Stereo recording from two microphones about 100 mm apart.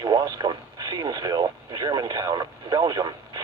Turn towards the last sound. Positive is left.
turn(degrees=-45)  # may be behind; listen again after turning